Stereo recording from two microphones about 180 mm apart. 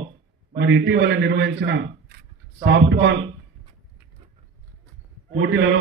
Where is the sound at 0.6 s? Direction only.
80° right.